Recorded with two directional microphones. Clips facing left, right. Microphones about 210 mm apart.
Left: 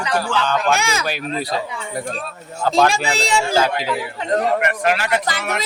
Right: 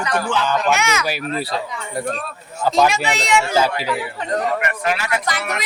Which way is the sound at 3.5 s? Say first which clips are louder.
Even; 10° right (ahead or behind).